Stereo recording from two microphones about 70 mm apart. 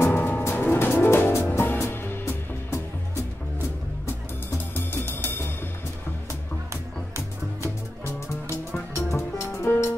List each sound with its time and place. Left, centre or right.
0.1 s music: left
4.7 s music: left
6.7 s music: right
8.9 s music: left